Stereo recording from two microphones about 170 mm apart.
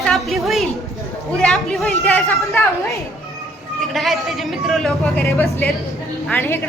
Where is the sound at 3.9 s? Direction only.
Centre (ahead or behind).